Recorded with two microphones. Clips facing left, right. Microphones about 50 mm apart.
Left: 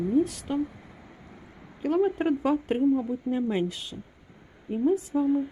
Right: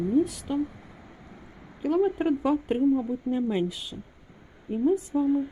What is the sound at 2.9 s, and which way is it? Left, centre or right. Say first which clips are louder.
Speech: even; centre.